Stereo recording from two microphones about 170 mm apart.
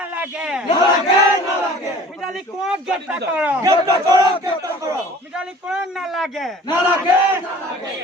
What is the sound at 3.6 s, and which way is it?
Speech, 20° right (ahead or behind).